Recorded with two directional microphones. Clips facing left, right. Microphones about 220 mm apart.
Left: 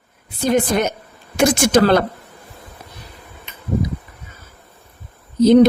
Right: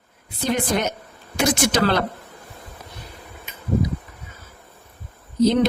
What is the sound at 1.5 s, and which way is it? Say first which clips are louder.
Speech: left 6 dB; 50° left (ahead or behind).